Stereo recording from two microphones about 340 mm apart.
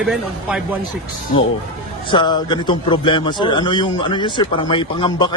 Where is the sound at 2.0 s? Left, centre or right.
Centre.